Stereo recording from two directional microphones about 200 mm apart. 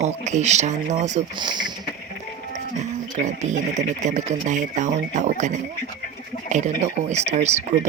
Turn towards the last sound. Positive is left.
turn(degrees=-35)  # may be behind; listen again after turning